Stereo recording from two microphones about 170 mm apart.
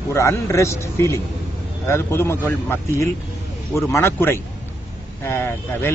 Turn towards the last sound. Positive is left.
turn(degrees=15)  # may be behind; listen again after turning